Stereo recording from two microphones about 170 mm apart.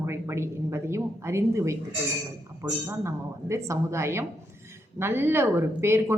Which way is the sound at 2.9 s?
15° right (ahead or behind).